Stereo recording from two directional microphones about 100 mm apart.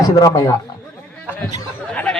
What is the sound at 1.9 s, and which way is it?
Speech, 10° left (ahead or behind).